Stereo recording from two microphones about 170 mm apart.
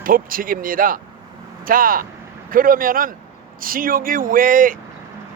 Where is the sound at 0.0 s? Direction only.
55° right (ahead or behind).